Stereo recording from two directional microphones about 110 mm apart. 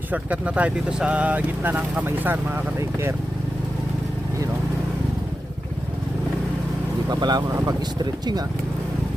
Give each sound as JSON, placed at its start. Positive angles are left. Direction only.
{"t": 0.1, "sound": "speech", "side_deg": -10}
{"t": 7.1, "sound": "speech", "side_deg": -40}